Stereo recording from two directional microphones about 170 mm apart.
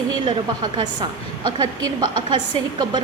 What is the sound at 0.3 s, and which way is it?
A woman's voice, 25° right (ahead or behind).